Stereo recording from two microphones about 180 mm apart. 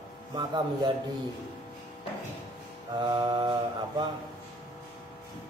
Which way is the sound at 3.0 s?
25° right (ahead or behind).